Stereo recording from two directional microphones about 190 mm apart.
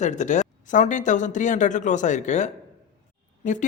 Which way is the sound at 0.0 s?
40° left (ahead or behind).